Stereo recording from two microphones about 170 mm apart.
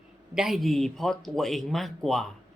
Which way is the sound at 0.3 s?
Centre (ahead or behind).